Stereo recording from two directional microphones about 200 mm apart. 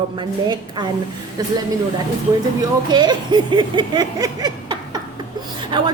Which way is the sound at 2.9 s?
20° right (ahead or behind).